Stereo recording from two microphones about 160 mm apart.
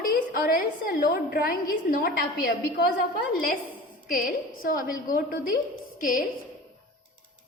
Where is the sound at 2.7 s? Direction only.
75° left (ahead or behind).